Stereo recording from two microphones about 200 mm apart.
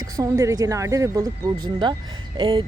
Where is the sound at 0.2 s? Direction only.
15° right (ahead or behind).